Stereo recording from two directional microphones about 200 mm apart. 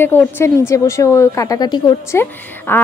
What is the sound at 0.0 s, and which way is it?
Speech, 10° left (ahead or behind).